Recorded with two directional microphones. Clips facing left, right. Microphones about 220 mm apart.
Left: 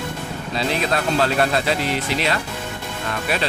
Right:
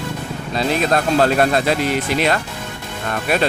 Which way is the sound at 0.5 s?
45° right (ahead or behind).